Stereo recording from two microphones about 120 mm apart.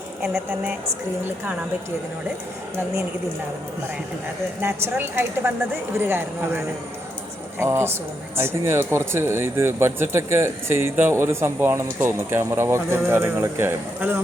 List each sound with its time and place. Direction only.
0.2 s a woman's voice: 5° right (ahead or behind)
4.6 s a woman's voice: 20° right (ahead or behind)
7.6 s speech: 20° right (ahead or behind)